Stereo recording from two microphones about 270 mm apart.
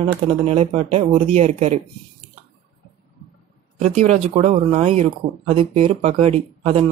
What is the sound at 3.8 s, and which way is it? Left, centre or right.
Speech, right.